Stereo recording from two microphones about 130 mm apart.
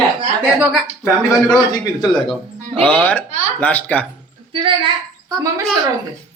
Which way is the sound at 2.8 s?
15° left (ahead or behind).